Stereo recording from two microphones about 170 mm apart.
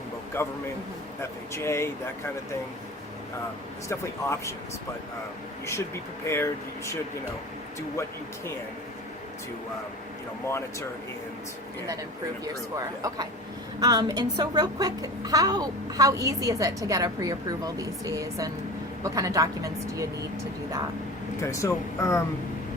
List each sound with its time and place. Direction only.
0.4 s speech: 15° left (ahead or behind)
3.8 s speech: 15° left (ahead or behind)
6.2 s speech: 15° left (ahead or behind)
12.7 s a child's voice: 20° right (ahead or behind)
21.4 s speech: 15° left (ahead or behind)